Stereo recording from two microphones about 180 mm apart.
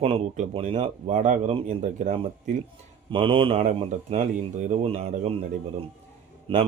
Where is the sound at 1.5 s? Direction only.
30° right (ahead or behind).